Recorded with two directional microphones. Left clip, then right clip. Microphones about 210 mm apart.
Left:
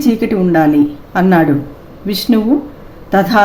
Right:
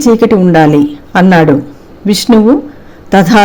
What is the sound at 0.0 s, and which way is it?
Speech, 40° right (ahead or behind).